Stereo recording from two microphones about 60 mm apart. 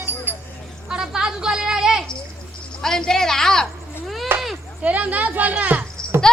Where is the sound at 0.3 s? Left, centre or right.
Right.